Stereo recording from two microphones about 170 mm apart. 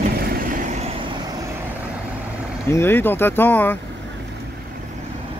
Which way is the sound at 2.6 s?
15° left (ahead or behind).